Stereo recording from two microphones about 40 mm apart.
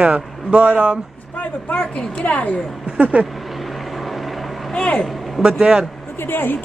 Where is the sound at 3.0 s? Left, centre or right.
Right.